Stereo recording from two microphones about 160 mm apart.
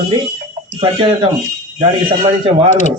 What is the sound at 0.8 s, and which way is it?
Speech, 30° right (ahead or behind).